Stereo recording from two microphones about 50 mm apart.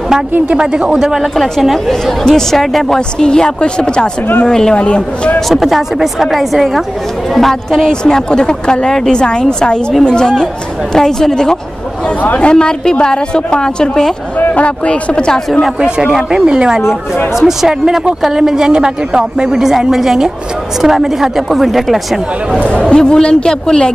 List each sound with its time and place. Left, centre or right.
0.5 s a woman's voice: centre
0.9 s a woman's voice: centre
3.2 s speech: centre
5.5 s speech: centre
8.0 s speech: centre
14.4 s speech: left
15.6 s a woman's voice: centre
17.4 s a woman's voice: centre
22.7 s speech: left